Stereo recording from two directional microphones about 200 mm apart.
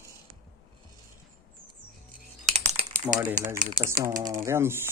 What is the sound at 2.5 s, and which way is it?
Typing, 35° right (ahead or behind).